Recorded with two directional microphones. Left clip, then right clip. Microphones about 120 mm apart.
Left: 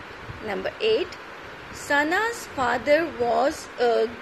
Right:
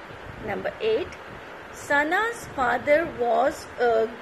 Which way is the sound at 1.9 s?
50° left (ahead or behind).